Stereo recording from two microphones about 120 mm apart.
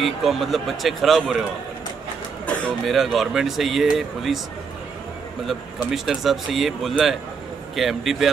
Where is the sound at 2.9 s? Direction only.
Centre (ahead or behind).